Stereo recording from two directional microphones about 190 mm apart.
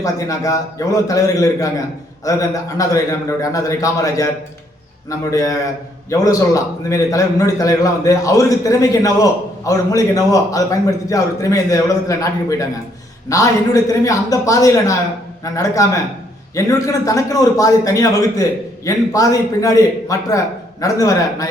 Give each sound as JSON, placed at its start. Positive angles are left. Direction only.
{"t": 0.0, "sound": "a man's voice", "side_deg": 15}